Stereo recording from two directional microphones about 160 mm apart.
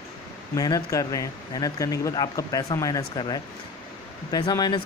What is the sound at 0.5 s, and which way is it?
Speech, 25° left (ahead or behind).